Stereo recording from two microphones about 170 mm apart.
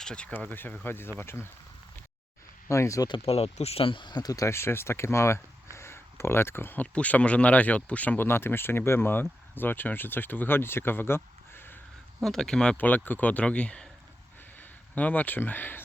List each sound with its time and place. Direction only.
0.0 s speech: 5° left (ahead or behind)
2.6 s speech: 15° left (ahead or behind)
3.2 s speech: 35° left (ahead or behind); by 15.8 s 10° left (ahead or behind)